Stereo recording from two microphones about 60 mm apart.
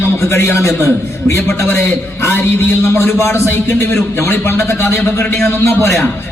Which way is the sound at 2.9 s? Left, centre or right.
Left.